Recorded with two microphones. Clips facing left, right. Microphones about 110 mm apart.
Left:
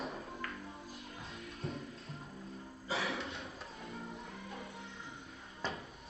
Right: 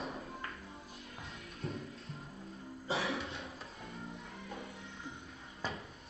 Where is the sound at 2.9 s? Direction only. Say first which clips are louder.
Right 2 dB; 25° right (ahead or behind).